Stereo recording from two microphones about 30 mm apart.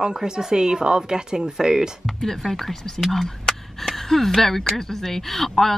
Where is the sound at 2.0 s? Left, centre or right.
Centre.